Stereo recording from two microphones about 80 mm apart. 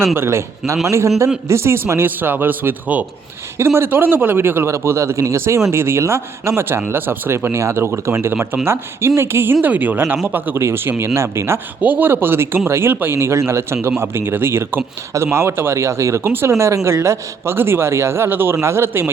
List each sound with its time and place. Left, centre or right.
0.1 s a man's voice: right
11.8 s a man's voice: right